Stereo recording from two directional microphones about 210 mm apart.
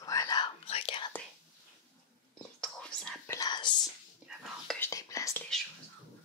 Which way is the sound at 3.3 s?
20° left (ahead or behind).